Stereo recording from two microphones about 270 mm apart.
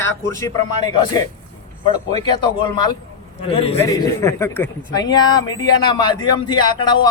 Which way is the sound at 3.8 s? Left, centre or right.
Centre.